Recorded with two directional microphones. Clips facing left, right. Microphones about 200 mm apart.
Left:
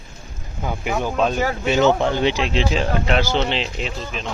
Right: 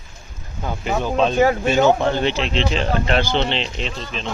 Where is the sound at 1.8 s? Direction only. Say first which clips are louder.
Even; 15° right (ahead or behind).